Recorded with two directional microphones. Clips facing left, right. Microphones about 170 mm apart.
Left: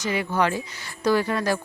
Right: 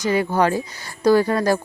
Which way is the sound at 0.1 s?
40° right (ahead or behind).